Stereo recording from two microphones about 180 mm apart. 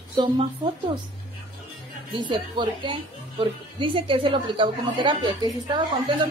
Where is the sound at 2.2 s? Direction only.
25° right (ahead or behind).